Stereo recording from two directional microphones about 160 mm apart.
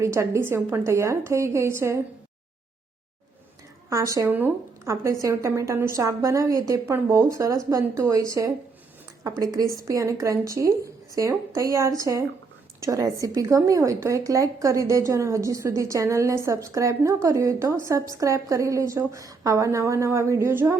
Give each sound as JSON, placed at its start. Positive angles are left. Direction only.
{"t": 0.0, "sound": "a woman's voice", "side_deg": -15}
{"t": 3.8, "sound": "a woman's voice", "side_deg": -20}